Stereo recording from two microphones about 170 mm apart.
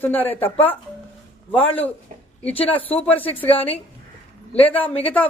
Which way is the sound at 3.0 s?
10° left (ahead or behind).